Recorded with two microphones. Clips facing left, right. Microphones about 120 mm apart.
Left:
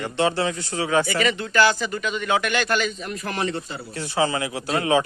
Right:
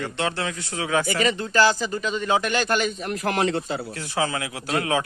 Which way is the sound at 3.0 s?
70° right (ahead or behind).